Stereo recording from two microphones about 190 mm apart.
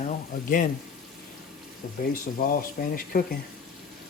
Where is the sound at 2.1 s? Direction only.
50° left (ahead or behind).